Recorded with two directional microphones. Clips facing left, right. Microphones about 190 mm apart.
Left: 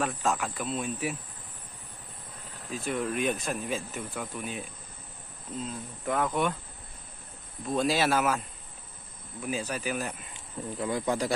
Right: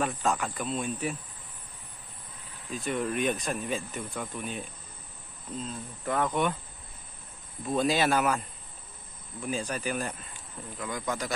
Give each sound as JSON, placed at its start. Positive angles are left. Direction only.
{"t": 0.0, "sound": "speech", "side_deg": 0}
{"t": 2.7, "sound": "speech", "side_deg": 0}
{"t": 7.6, "sound": "speech", "side_deg": 0}
{"t": 10.8, "sound": "speech", "side_deg": 30}